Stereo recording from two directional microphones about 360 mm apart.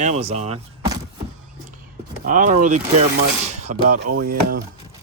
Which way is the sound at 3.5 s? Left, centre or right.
Right.